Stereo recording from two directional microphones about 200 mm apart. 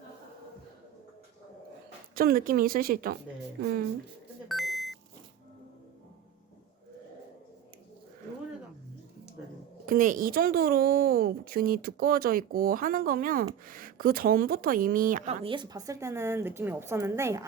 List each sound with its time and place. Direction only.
2.1 s a woman's voice: 45° right (ahead or behind)
4.4 s beep: centre (ahead or behind)
9.8 s a woman's voice: 45° right (ahead or behind)
15.4 s a woman's voice: 25° right (ahead or behind)